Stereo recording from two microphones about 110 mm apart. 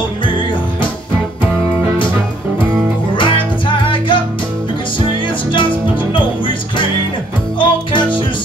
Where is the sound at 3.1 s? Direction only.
50° left (ahead or behind).